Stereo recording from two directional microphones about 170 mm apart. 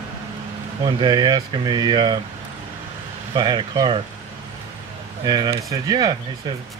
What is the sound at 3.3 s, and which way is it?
Speech, 25° right (ahead or behind).